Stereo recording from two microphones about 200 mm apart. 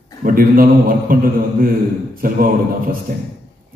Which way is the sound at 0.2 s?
45° right (ahead or behind).